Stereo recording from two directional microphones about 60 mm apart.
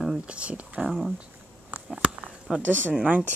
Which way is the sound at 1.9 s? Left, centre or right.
Centre.